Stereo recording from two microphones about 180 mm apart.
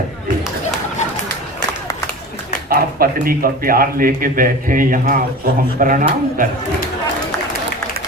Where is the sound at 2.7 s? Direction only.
55° right (ahead or behind).